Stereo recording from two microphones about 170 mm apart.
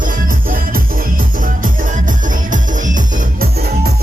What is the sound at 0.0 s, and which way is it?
Music, 50° right (ahead or behind).